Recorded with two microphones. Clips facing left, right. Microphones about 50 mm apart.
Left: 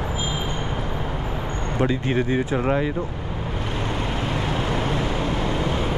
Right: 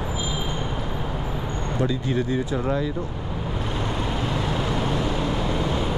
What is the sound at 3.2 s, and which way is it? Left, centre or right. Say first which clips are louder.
Vehicle: even; centre.